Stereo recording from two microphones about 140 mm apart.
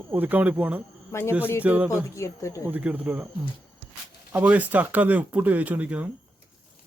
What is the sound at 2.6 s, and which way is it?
Speech, 10° right (ahead or behind).